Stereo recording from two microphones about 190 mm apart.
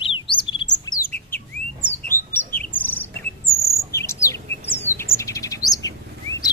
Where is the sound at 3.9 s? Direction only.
15° left (ahead or behind).